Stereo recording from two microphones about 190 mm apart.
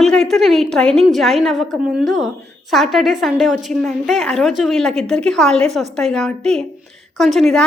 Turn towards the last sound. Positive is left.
turn(degrees=0)  # may be behind; listen again after turning